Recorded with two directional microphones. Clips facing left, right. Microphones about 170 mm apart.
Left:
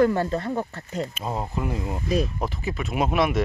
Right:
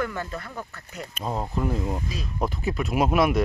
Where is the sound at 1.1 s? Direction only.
5° left (ahead or behind).